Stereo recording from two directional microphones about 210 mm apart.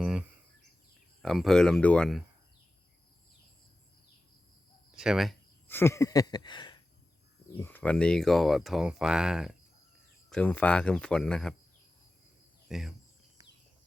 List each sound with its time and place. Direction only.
0.0 s a sound: 5° right (ahead or behind)
1.2 s speech: centre (ahead or behind)
4.9 s speech: centre (ahead or behind)
5.6 s a sound: 10° left (ahead or behind)
7.5 s speech: 10° left (ahead or behind)
12.6 s speech: centre (ahead or behind)